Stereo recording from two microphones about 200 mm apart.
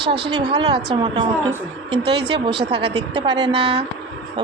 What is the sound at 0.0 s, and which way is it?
Speech, 55° right (ahead or behind).